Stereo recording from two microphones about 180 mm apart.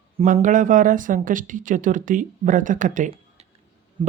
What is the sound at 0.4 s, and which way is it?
A woman's voice, 45° right (ahead or behind).